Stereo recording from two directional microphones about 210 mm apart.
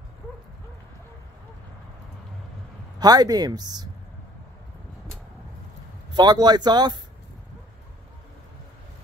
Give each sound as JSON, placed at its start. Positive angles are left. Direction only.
{"t": 3.0, "sound": "speech", "side_deg": -20}
{"t": 6.1, "sound": "speech", "side_deg": -20}